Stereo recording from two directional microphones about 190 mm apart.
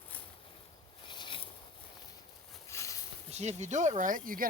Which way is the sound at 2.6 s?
15° left (ahead or behind).